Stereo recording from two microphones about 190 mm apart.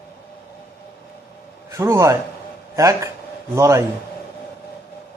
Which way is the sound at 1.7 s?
15° right (ahead or behind).